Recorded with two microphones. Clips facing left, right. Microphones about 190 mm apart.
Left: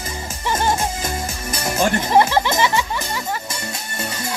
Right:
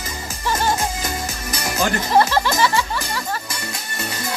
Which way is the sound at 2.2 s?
20° left (ahead or behind).